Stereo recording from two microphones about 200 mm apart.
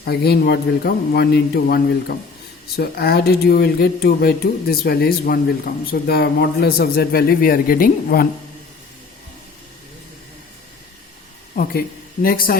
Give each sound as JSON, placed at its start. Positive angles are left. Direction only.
{"t": 0.0, "sound": "speech", "side_deg": 55}
{"t": 11.5, "sound": "a woman's voice", "side_deg": 45}